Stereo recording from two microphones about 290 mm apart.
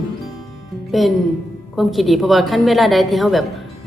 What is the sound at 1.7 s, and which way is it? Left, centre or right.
Speech, centre.